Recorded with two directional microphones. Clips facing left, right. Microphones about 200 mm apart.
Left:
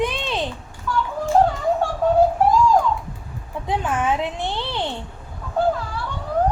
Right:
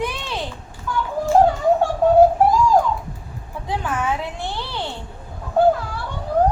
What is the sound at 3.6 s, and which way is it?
Speech, 20° left (ahead or behind).